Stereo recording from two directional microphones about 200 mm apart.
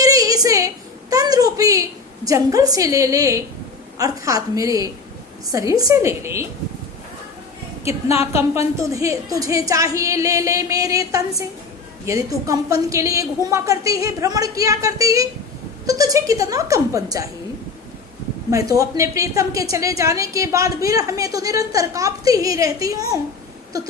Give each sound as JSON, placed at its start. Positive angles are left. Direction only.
{"t": 0.0, "sound": "a sound", "side_deg": -15}
{"t": 2.2, "sound": "a woman's voice", "side_deg": -15}
{"t": 8.4, "sound": "a woman's voice", "side_deg": -15}
{"t": 18.5, "sound": "a woman's voice", "side_deg": -15}